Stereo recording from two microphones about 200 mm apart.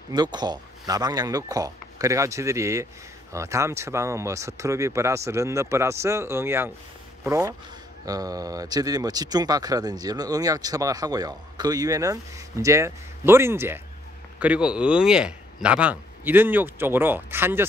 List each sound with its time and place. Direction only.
0.1 s speech: 20° right (ahead or behind)